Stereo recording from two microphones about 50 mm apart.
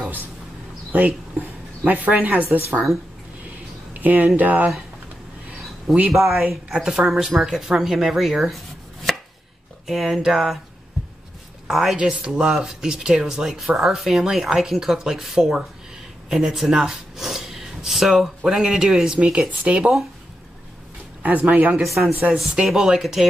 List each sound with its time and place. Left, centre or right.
0.9 s a woman's voice: right
4.0 s a woman's voice: right
6.0 s speech: centre
9.1 s chopping: centre
9.8 s speech: centre
11.6 s a woman's voice: centre
16.3 s gasp: centre
18.4 s speech: centre
21.2 s a woman's voice: right
21.8 s speech: centre